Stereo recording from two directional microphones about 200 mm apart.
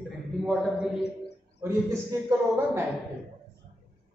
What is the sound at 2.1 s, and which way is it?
Speech, 15° right (ahead or behind).